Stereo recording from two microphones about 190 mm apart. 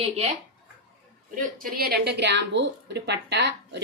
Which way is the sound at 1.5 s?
50° right (ahead or behind).